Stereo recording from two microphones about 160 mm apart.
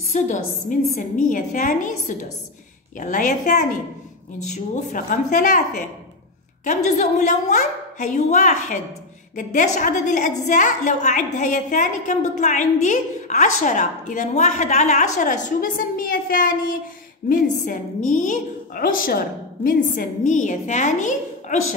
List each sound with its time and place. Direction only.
0.1 s a woman's voice: 45° left (ahead or behind)
6.6 s a woman's voice: 45° left (ahead or behind)
18.8 s a woman's voice: 60° left (ahead or behind)